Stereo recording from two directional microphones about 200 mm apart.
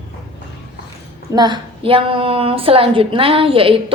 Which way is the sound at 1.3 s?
20° right (ahead or behind).